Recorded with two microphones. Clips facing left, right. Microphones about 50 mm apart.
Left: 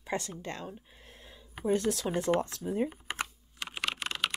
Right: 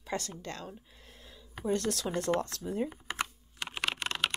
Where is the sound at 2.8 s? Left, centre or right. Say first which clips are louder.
Left 1 dB; centre.